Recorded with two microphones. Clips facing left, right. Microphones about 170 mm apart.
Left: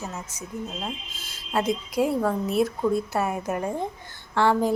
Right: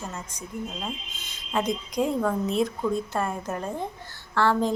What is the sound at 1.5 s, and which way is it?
Speech, 5° left (ahead or behind).